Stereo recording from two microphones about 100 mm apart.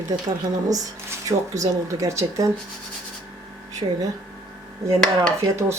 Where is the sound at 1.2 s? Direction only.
35° right (ahead or behind).